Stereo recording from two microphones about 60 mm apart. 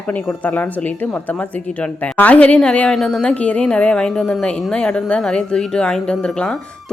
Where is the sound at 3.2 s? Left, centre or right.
Left.